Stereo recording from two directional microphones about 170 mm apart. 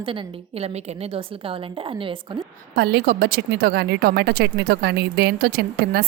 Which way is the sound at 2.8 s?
65° right (ahead or behind).